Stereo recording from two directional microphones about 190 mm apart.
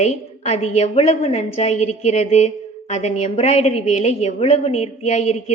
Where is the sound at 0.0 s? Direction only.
35° left (ahead or behind).